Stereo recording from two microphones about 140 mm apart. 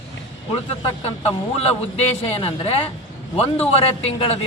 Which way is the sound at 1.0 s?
45° left (ahead or behind).